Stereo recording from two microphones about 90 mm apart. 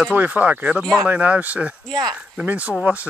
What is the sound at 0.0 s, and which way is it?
Speech, 15° right (ahead or behind).